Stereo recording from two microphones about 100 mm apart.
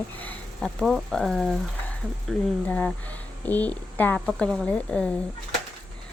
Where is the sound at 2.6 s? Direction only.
15° left (ahead or behind).